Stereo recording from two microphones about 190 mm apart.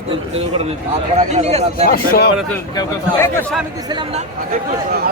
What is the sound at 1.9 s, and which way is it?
Speech, 55° left (ahead or behind).